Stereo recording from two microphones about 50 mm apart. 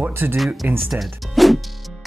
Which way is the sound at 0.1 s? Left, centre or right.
Right.